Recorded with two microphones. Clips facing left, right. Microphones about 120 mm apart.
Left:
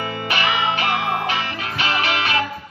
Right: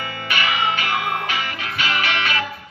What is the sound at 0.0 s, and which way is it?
Music, 30° left (ahead or behind).